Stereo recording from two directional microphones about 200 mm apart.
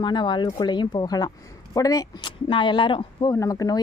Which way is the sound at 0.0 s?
25° left (ahead or behind).